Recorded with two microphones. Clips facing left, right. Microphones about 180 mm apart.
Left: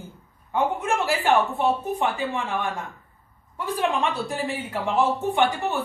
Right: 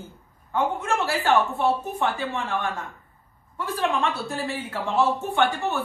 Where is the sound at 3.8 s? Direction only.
15° left (ahead or behind).